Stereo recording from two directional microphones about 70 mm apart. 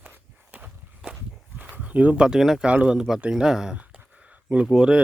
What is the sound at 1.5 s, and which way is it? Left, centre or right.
Speech, right.